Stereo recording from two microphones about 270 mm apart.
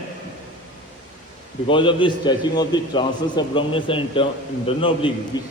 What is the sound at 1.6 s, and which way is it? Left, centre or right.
A man's voice, centre.